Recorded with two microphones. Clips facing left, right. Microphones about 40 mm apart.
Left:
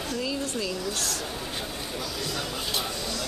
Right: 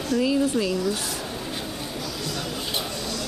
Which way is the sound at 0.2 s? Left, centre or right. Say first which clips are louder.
Right 10 dB; centre.